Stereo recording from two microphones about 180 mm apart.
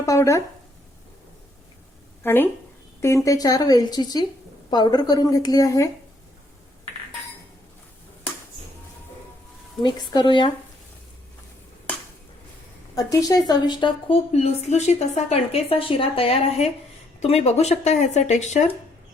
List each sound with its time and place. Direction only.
0.0 s speech: 15° left (ahead or behind)
2.2 s a woman's voice: 10° left (ahead or behind)
9.8 s a woman's voice: 25° left (ahead or behind)
13.0 s a woman's voice: 20° left (ahead or behind); by 18.6 s 40° left (ahead or behind)